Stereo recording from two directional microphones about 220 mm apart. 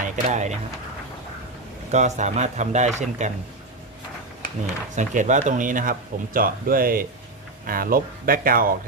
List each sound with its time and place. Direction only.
0.0 s speech: 30° right (ahead or behind)
1.9 s speech: 30° right (ahead or behind)
4.9 s speech: 35° right (ahead or behind)